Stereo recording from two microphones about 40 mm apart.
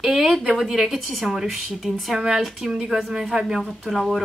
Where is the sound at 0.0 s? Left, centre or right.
Centre.